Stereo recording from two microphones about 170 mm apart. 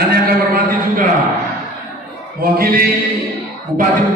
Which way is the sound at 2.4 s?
60° right (ahead or behind).